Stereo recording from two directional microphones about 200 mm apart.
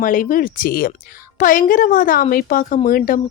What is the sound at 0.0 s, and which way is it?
Speech, 40° left (ahead or behind).